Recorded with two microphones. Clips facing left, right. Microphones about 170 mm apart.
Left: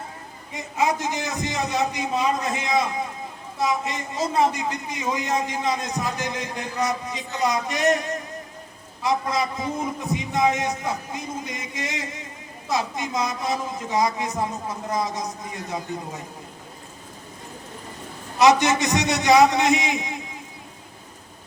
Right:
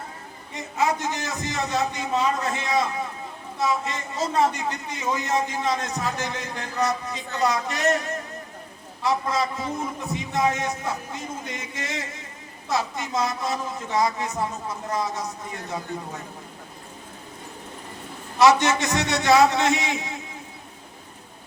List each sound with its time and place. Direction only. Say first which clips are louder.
0.8 s a man's voice: left 1 dB; 15° left (ahead or behind)
18.3 s a man's voice: left 1 dB; 15° left (ahead or behind)